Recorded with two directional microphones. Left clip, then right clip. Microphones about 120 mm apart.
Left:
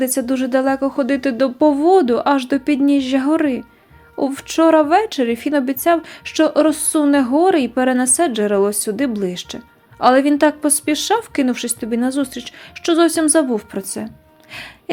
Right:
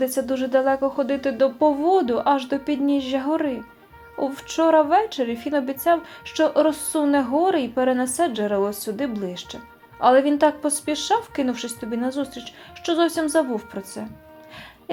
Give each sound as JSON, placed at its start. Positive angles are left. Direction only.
{"t": 0.0, "sound": "a woman's voice", "side_deg": 35}